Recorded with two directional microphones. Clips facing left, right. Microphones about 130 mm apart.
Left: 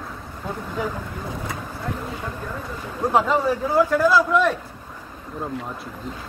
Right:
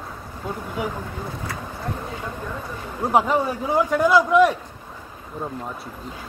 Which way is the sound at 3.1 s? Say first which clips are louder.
Even; 15° right (ahead or behind).